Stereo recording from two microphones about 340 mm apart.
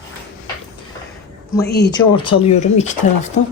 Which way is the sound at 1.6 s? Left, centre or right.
Left.